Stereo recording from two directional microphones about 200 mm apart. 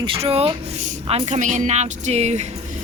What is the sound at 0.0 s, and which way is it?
A woman's voice, 25° right (ahead or behind).